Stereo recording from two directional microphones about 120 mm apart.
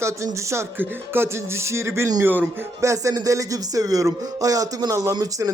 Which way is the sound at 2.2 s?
15° right (ahead or behind).